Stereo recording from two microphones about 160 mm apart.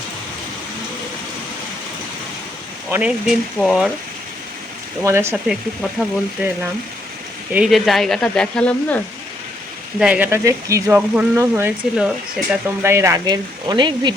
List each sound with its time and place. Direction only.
2.9 s speech: 10° right (ahead or behind)
5.0 s speech: 15° right (ahead or behind)
5.5 s speech: centre (ahead or behind)
7.5 s speech: 5° right (ahead or behind)
10.0 s speech: 10° right (ahead or behind)
11.9 s speech: 5° right (ahead or behind)
12.6 s speech: 15° right (ahead or behind)